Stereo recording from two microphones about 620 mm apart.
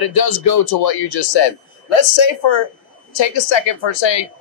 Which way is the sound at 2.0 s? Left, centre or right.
Left.